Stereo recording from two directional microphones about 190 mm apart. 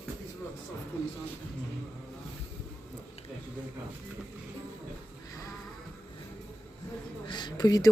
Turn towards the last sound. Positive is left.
turn(degrees=20)  # may be behind; listen again after turning